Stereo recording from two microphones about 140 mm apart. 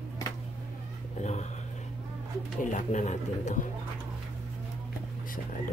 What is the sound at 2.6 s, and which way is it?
Speech, 60° left (ahead or behind).